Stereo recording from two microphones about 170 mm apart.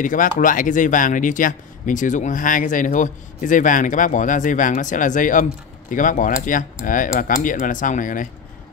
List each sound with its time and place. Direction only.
0.0 s speech: 50° left (ahead or behind)